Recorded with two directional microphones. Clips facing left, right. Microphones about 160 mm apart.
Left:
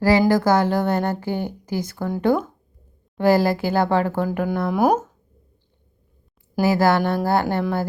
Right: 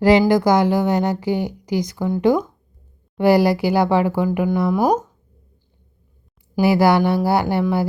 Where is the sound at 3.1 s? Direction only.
15° right (ahead or behind).